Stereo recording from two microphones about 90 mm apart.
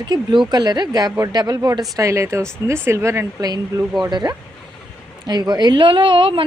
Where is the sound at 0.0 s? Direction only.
55° right (ahead or behind); by 3.2 s 30° right (ahead or behind).